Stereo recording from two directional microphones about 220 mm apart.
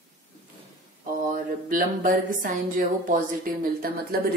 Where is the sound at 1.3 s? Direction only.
35° right (ahead or behind).